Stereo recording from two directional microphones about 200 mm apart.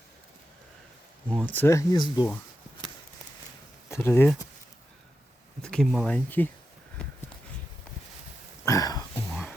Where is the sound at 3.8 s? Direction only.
15° left (ahead or behind).